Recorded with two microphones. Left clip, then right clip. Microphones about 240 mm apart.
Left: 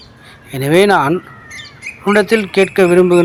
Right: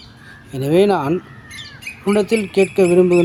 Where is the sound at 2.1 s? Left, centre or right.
Centre.